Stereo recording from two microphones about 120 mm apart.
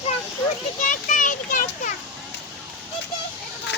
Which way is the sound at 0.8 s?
90° left.